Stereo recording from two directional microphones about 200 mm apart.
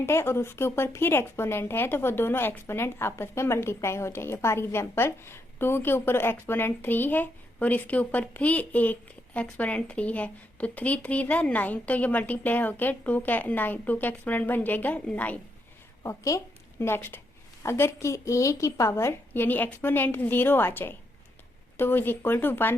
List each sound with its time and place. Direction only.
0.0 s a woman's voice: 15° left (ahead or behind)